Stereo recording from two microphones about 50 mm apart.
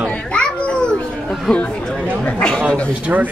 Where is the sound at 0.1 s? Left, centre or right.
Left.